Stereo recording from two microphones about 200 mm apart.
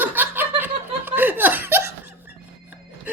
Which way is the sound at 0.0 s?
10° right (ahead or behind).